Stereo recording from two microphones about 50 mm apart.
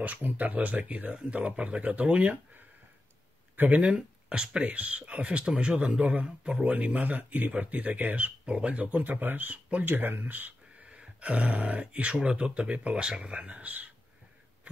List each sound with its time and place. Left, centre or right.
0.0 s speech: right
3.8 s speech: right
11.0 s speech: right